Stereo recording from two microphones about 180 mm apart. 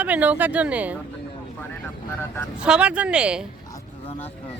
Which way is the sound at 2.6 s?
5° right (ahead or behind).